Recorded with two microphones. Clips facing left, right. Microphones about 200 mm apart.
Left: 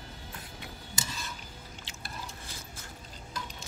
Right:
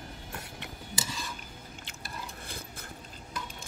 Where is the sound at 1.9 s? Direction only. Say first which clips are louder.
Even; 55° right (ahead or behind).